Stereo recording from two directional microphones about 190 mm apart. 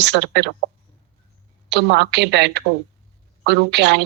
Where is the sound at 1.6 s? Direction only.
65° right (ahead or behind).